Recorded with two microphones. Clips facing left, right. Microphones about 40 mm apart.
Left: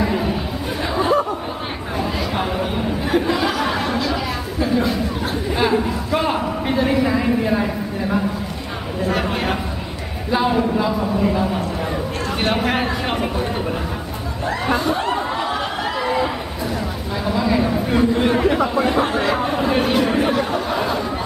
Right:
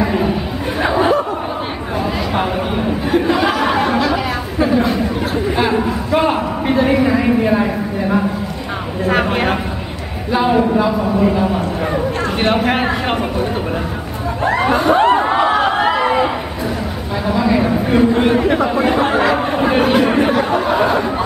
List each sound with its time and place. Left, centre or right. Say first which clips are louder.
0.0 s chatter: right 4 dB; centre
0.8 s laughter: right 6 dB; right
3.2 s chatter: right 5 dB; centre
5.8 s a sound: right 5 dB; centre
9.0 s a sound: right 5 dB; right
10.3 s speech: right 4 dB; centre
12.5 s speech: right 4 dB; centre
14.4 s a sound: right 6 dB; right
17.3 s a sound: right 4 dB; centre
18.6 s speech: right 3 dB; centre
19.0 s speech: right 5 dB; right
19.3 s speech: right 4 dB; centre